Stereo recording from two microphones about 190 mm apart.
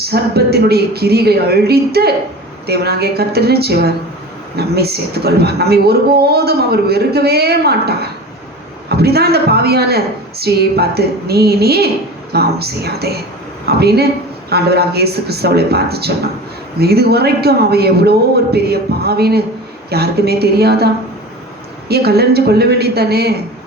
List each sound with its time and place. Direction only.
0.1 s a woman's voice: 55° right (ahead or behind)